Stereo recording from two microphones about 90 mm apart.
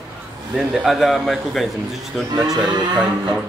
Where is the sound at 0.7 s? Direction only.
5° right (ahead or behind).